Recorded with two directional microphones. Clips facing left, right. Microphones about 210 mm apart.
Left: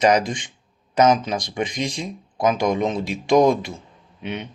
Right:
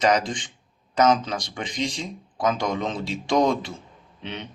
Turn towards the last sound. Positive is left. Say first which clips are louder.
# left 5 dB
turn(degrees=15)  # may be behind; listen again after turning